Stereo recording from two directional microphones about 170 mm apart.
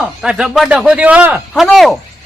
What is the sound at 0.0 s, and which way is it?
Speech, 5° right (ahead or behind).